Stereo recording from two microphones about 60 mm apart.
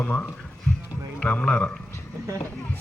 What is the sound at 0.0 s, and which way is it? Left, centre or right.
Speech, left.